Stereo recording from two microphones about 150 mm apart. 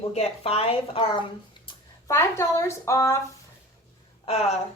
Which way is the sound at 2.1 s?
20° left (ahead or behind).